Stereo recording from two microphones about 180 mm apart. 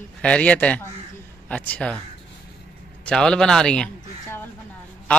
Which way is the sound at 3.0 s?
5° left (ahead or behind).